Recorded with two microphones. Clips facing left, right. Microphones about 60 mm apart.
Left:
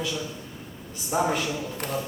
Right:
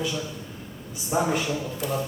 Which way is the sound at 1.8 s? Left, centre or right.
Left.